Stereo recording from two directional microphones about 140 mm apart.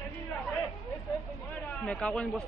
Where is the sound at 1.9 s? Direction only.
5° left (ahead or behind).